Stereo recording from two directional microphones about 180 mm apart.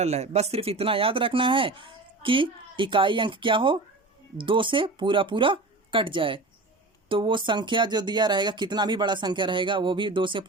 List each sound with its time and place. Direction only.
0.0 s speech: 35° right (ahead or behind)